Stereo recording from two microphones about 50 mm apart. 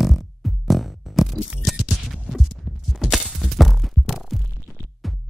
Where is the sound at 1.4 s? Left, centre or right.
Centre.